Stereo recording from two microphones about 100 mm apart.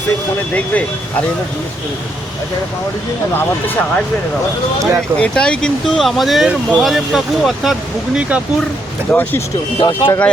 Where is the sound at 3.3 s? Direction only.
15° left (ahead or behind).